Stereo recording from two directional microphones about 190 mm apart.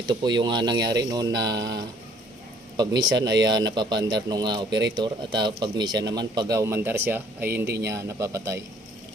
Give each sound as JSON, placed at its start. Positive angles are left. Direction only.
{"t": 0.1, "sound": "speech", "side_deg": -20}
{"t": 3.2, "sound": "speech", "side_deg": -65}
{"t": 3.4, "sound": "speech", "side_deg": -20}
{"t": 4.7, "sound": "speech", "side_deg": -65}
{"t": 4.9, "sound": "a man's voice", "side_deg": -25}